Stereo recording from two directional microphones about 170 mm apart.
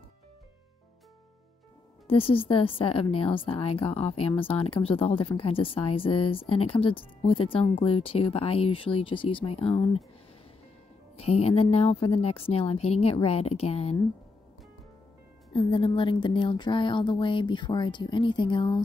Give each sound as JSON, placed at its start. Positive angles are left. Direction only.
{"t": 2.0, "sound": "a woman's voice", "side_deg": 35}
{"t": 11.1, "sound": "a woman's voice", "side_deg": 35}
{"t": 15.5, "sound": "speech", "side_deg": 30}